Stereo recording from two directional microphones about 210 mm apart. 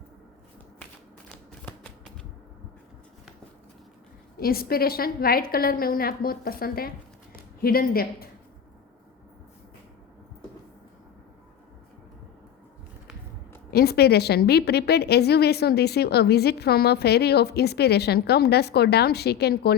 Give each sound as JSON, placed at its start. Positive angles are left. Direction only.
{"t": 1.6, "sound": "shuffling cards", "side_deg": 5}
{"t": 4.4, "sound": "a woman's voice", "side_deg": 45}
{"t": 13.7, "sound": "a woman's voice", "side_deg": 50}